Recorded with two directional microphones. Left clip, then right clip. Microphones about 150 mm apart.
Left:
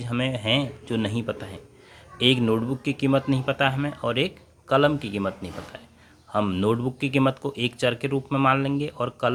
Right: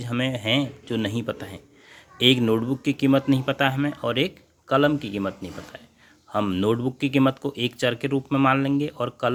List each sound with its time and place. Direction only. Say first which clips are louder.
0.0 s speech: right 1 dB; 35° right (ahead or behind)